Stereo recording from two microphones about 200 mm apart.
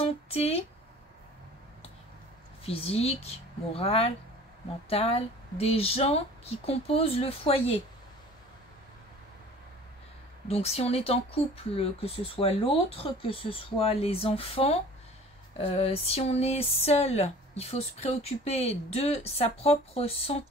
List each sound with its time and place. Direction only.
0.0 s speech: 30° left (ahead or behind)
2.6 s speech: 30° left (ahead or behind)
10.5 s speech: 30° left (ahead or behind)